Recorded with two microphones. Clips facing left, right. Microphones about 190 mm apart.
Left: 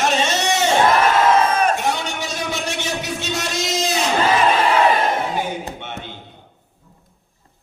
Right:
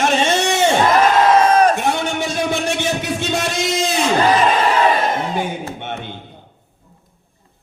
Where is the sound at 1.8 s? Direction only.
55° right (ahead or behind).